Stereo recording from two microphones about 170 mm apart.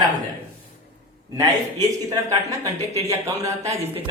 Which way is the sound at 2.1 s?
20° right (ahead or behind).